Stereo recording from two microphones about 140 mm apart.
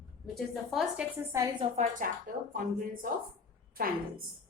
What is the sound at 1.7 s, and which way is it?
Speech, 80° right.